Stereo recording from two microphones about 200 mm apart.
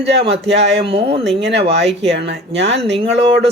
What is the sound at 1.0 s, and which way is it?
Speech, 55° right (ahead or behind).